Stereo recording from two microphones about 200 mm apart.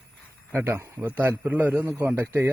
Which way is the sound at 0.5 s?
10° right (ahead or behind).